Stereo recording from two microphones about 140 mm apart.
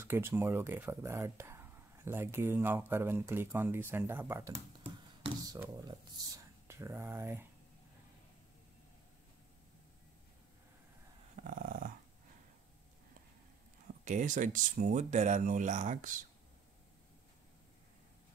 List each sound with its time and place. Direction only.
0.0 s speech: 15° right (ahead or behind)
11.4 s dog: 75° right (ahead or behind)
14.0 s speech: 65° right (ahead or behind)